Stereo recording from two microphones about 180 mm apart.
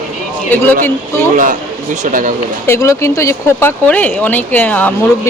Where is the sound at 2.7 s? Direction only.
15° left (ahead or behind).